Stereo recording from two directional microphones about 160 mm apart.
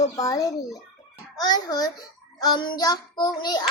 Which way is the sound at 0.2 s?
20° left (ahead or behind).